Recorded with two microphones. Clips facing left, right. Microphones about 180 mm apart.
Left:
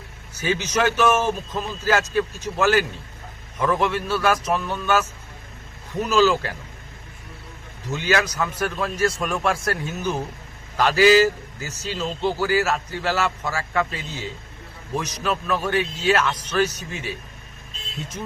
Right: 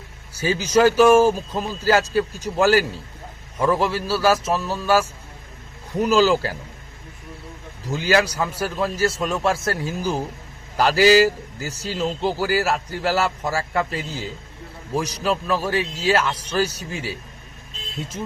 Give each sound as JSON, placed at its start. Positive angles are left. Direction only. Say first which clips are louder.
{"t": 0.3, "sound": "a man's voice", "louder": "right 5 dB", "side_deg": -30}
{"t": 7.9, "sound": "a man's voice", "louder": "right 3 dB", "side_deg": -35}